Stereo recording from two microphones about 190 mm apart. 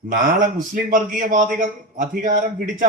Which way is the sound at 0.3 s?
45° right (ahead or behind).